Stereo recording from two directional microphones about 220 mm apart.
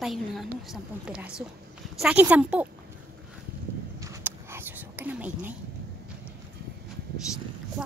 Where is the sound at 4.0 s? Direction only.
15° right (ahead or behind).